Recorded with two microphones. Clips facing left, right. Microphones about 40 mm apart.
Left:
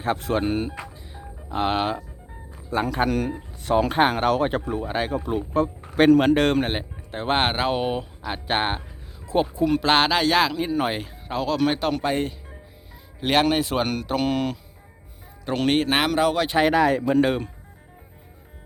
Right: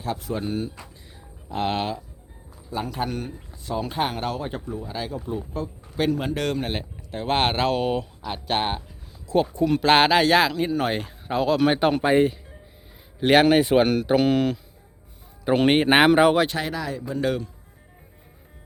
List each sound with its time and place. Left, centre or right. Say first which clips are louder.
0.2 s speech: left 4 dB; left
1.5 s speech: left 2 dB; centre
2.6 s speech: left 5 dB; left
3.1 s speech: left 7 dB; left
4.9 s speech: left 5 dB; left
6.0 s speech: left 8 dB; left
6.3 s speech: left 6 dB; left
7.3 s speech: right 1 dB; centre
9.6 s speech: right 2 dB; centre
15.4 s speech: right 3 dB; centre
16.6 s speech: left 10 dB; left
17.2 s speech: left 4 dB; left